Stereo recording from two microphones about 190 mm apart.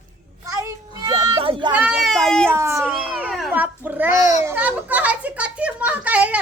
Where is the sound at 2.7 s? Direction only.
5° right (ahead or behind).